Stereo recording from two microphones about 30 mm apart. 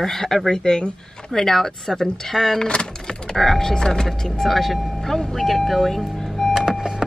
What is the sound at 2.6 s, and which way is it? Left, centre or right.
Speech, left.